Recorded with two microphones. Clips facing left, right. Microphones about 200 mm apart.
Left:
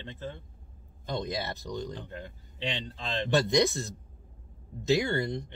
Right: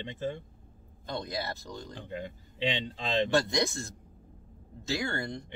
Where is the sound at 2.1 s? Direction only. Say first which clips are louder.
Right 4 dB; 15° right (ahead or behind).